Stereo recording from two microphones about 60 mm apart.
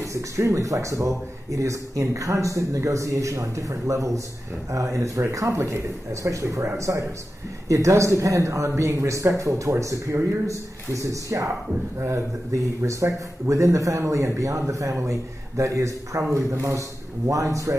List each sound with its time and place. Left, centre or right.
0.0 s a man's voice: right
7.6 s a man's voice: right
12.8 s a man's voice: right
17.3 s speech: right